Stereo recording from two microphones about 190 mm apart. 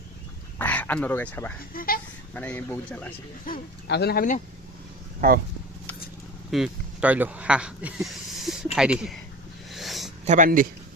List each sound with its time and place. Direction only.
0.6 s speech: 10° left (ahead or behind)
1.7 s speech: 50° left (ahead or behind)
2.3 s speech: 10° left (ahead or behind)
3.5 s speech: 45° left (ahead or behind)
3.8 s speech: 60° left (ahead or behind)
5.2 s speech: 50° right (ahead or behind)
6.5 s speech: 5° right (ahead or behind)
9.7 s a sound: centre (ahead or behind)
10.2 s speech: 45° right (ahead or behind)